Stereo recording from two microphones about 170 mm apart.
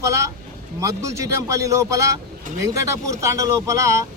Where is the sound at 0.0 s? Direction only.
20° right (ahead or behind).